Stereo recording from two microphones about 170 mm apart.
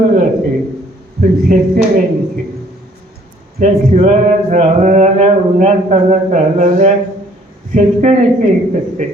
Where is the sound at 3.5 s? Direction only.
40° right (ahead or behind).